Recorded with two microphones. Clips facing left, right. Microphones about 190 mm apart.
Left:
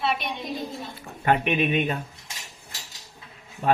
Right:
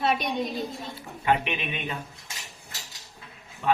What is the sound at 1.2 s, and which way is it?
Speech, 50° left (ahead or behind).